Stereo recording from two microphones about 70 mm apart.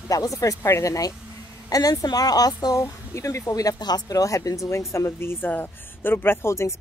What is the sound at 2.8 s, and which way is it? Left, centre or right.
Speech, left.